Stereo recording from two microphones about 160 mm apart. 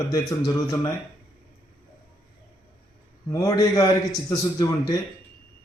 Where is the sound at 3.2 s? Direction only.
20° left (ahead or behind).